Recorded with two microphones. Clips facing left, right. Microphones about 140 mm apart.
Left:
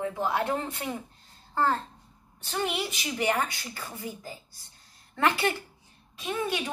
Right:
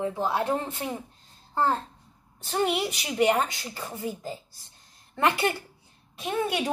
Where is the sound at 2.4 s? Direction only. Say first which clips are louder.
Right 5 dB; 35° right (ahead or behind).